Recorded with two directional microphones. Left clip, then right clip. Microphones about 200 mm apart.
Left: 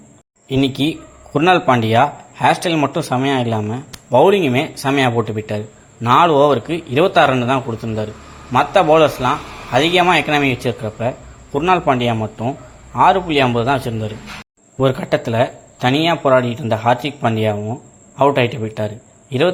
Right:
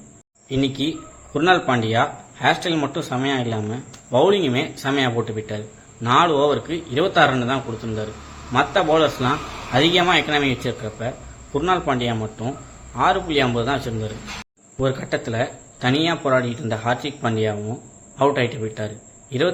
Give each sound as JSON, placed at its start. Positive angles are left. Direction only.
{"t": 0.4, "sound": "a man's voice", "side_deg": 25}